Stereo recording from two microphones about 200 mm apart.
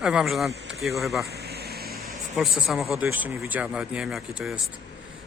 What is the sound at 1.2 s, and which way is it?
Vehicle, 55° right (ahead or behind).